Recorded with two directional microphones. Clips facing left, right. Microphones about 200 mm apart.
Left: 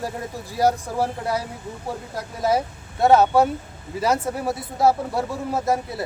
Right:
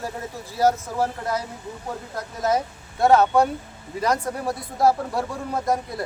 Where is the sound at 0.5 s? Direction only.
10° left (ahead or behind).